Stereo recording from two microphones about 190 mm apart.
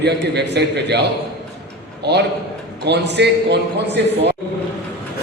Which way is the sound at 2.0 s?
60° right (ahead or behind).